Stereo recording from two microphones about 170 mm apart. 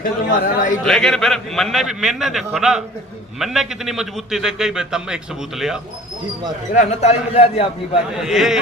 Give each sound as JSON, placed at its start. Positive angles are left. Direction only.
{"t": 0.0, "sound": "a man's voice", "side_deg": 55}
{"t": 0.9, "sound": "a man's voice", "side_deg": 5}
{"t": 6.7, "sound": "a man's voice", "side_deg": 40}
{"t": 8.1, "sound": "a man's voice", "side_deg": 0}